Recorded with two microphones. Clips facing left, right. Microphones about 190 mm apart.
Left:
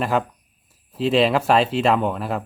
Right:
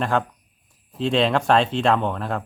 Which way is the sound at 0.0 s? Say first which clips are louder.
Left 1 dB; 5° left (ahead or behind).